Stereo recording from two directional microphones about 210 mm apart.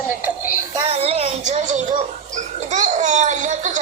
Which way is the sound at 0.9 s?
30° right (ahead or behind).